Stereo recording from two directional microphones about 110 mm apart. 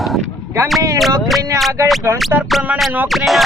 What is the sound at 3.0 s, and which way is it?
Speech, centre (ahead or behind).